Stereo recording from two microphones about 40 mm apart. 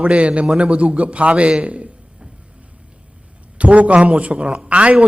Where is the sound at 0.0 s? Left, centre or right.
Right.